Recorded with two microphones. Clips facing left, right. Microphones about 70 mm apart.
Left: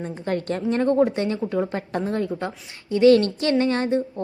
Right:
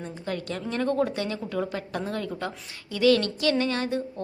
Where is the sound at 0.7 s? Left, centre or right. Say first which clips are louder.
Left 6 dB; left.